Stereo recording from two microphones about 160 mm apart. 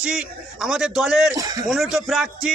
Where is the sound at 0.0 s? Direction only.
5° right (ahead or behind).